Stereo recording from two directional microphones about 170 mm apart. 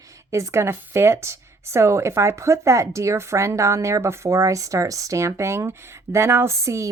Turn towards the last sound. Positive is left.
turn(degrees=-15)  # may be behind; listen again after turning